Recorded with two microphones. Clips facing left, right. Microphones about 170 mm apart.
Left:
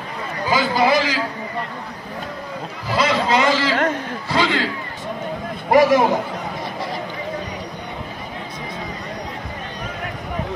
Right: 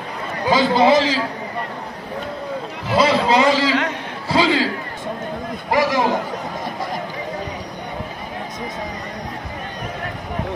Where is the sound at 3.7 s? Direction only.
50° left (ahead or behind).